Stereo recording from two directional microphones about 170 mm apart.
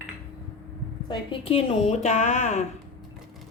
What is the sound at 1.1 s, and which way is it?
A woman's voice, 30° left (ahead or behind).